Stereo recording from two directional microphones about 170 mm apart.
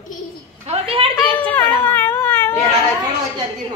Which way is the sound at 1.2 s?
10° left (ahead or behind).